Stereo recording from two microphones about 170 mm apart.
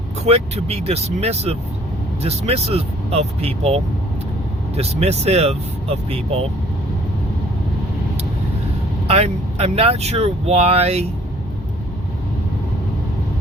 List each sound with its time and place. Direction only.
0.3 s speech: 35° right (ahead or behind)
9.0 s speech: 35° right (ahead or behind)